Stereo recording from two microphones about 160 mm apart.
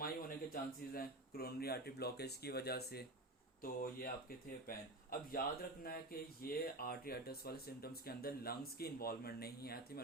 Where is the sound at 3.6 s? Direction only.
65° left (ahead or behind).